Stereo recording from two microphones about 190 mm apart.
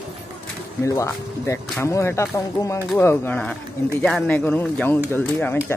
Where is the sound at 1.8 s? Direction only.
15° left (ahead or behind).